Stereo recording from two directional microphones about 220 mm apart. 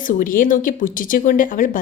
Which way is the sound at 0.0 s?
40° left (ahead or behind).